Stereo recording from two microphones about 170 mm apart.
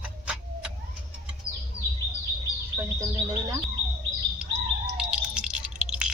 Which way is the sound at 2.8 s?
20° right (ahead or behind).